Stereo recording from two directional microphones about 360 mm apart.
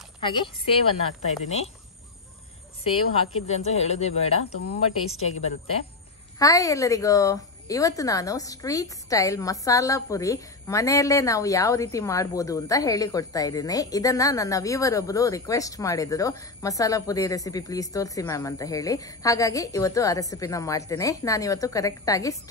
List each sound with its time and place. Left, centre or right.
0.2 s a woman's voice: centre
3.3 s a woman's voice: centre
4.4 s speech: left
5.1 s a woman's voice: centre